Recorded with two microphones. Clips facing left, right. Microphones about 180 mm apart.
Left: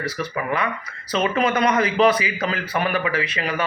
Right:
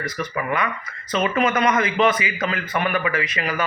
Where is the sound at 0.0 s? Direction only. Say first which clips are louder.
Even; 30° left (ahead or behind).